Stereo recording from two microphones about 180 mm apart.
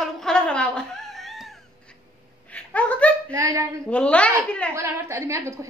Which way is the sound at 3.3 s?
15° right (ahead or behind).